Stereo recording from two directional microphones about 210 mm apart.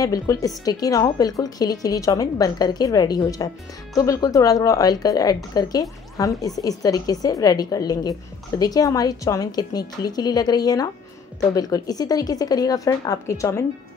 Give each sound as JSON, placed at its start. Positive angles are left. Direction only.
{"t": 0.0, "sound": "a woman's voice", "side_deg": 15}